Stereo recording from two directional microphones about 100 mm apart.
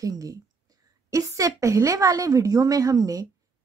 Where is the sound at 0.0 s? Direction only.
35° right (ahead or behind).